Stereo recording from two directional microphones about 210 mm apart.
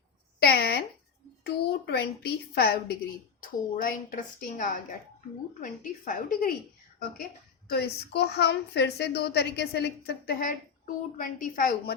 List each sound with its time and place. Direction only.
0.3 s a woman's voice: 50° left (ahead or behind)
7.7 s a woman's voice: 50° left (ahead or behind)